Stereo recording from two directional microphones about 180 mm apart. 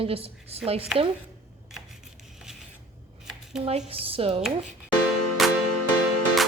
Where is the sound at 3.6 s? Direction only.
30° right (ahead or behind).